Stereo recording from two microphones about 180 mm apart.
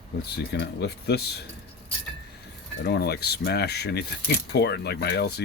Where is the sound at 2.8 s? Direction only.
65° left (ahead or behind).